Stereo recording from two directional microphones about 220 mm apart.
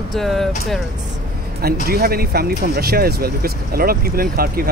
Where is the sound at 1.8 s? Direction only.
45° right (ahead or behind).